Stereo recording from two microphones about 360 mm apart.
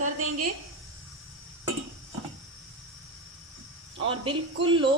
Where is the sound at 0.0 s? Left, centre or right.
Right.